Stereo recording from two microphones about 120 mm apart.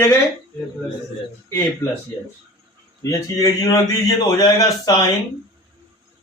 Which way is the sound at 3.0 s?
30° left (ahead or behind).